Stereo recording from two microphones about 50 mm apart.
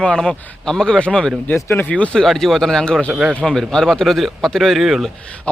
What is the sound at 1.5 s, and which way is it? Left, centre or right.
Speech, left.